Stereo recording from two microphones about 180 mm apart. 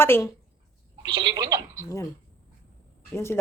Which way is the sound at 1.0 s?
25° right (ahead or behind).